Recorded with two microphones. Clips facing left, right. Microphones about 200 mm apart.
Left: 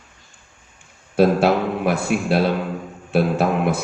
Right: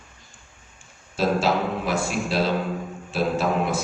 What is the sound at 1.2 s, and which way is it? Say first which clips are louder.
A man's voice: left 6 dB; 60° left (ahead or behind).